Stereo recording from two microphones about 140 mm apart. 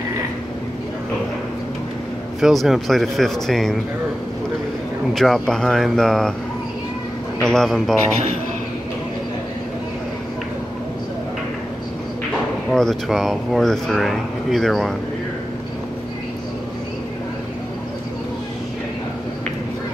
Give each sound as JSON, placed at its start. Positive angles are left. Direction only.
{"t": 2.4, "sound": "speech", "side_deg": 0}
{"t": 5.1, "sound": "speech", "side_deg": 0}
{"t": 7.4, "sound": "speech", "side_deg": 5}
{"t": 12.7, "sound": "speech", "side_deg": 0}